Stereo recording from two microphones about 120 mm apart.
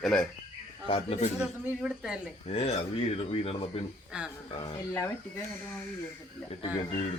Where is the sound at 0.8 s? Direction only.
50° left (ahead or behind).